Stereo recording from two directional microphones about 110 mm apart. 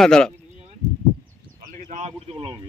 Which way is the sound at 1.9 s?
80° right.